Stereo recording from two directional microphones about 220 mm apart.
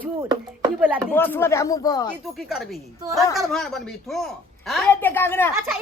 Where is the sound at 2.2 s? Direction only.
Centre (ahead or behind).